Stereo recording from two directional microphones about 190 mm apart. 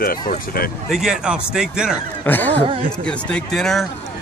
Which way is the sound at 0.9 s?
5° right (ahead or behind).